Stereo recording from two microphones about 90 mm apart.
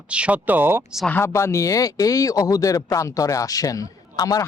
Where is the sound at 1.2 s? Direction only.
30° left (ahead or behind).